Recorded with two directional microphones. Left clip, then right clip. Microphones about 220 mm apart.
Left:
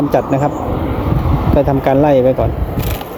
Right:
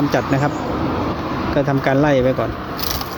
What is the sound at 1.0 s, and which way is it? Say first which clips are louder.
Vehicle: left 3 dB; 35° left (ahead or behind).